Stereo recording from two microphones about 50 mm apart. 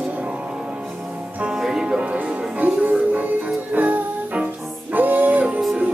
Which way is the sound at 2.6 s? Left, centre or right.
Right.